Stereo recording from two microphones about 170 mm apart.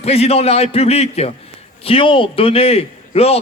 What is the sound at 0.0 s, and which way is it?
A man's voice, 35° left (ahead or behind).